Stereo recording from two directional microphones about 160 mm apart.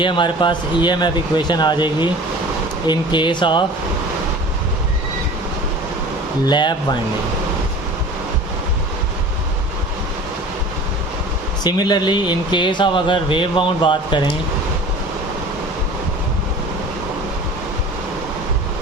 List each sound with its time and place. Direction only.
0.0 s speech: 30° left (ahead or behind)
6.4 s speech: 30° left (ahead or behind)
11.6 s speech: 25° left (ahead or behind)